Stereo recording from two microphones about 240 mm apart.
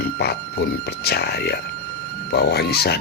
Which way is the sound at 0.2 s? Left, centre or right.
Left.